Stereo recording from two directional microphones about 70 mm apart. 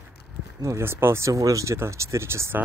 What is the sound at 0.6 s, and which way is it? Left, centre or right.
Speech, right.